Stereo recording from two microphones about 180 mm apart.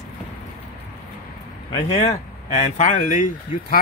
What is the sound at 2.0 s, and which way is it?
Speech, 35° left (ahead or behind).